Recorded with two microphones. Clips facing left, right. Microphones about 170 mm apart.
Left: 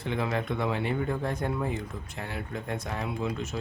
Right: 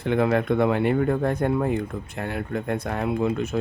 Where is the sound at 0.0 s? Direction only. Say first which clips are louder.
Right 9 dB; 55° right (ahead or behind).